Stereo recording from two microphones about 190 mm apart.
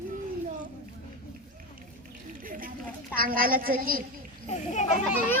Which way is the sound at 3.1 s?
50° right (ahead or behind).